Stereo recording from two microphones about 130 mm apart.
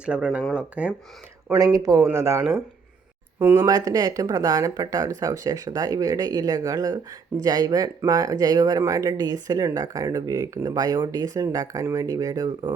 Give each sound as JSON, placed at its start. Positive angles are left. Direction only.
{"t": 0.0, "sound": "speech", "side_deg": -10}
{"t": 1.5, "sound": "speech", "side_deg": -30}
{"t": 3.4, "sound": "speech", "side_deg": -20}